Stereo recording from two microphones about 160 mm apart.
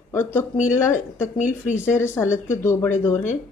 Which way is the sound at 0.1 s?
15° left (ahead or behind).